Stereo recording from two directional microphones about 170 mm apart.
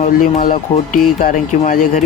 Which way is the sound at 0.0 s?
50° left (ahead or behind).